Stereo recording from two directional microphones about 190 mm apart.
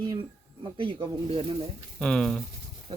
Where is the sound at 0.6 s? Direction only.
25° right (ahead or behind).